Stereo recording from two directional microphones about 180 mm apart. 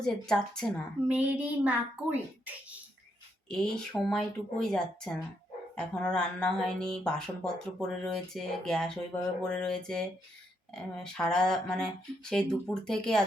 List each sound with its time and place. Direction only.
0.0 s speech: 5° left (ahead or behind)
1.0 s a child's voice: 10° right (ahead or behind)
3.5 s speech: 5° left (ahead or behind)